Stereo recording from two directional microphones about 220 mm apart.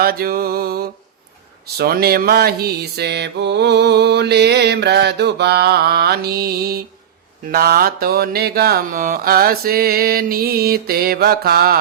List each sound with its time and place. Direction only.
0.0 s mantra: 45° right (ahead or behind)